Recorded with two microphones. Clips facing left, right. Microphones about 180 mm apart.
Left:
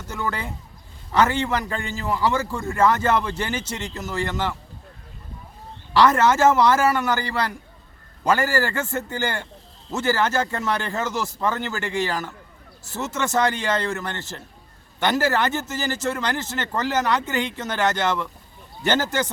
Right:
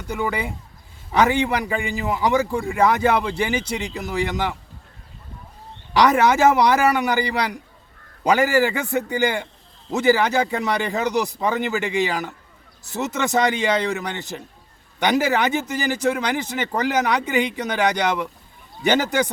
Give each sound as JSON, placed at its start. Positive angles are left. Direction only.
{"t": 0.1, "sound": "a man's voice", "side_deg": -15}
{"t": 5.9, "sound": "a man's voice", "side_deg": -15}